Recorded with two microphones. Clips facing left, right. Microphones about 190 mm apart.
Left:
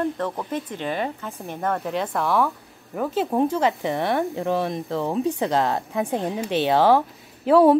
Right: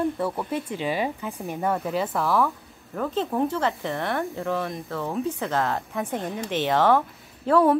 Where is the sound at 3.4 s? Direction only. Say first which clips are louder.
Left 4 dB; 15° left (ahead or behind).